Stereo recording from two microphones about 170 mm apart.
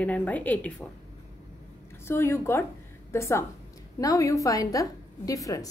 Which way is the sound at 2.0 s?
15° left (ahead or behind).